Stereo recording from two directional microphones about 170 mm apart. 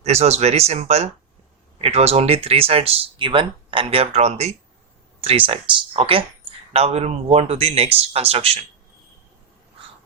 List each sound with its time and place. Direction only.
0.0 s speech: 40° right (ahead or behind)